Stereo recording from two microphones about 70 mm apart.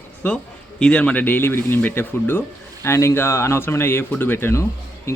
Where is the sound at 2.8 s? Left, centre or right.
Left.